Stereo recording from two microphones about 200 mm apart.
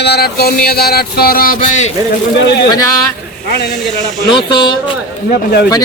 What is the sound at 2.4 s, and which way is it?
A man's voice, 60° left (ahead or behind).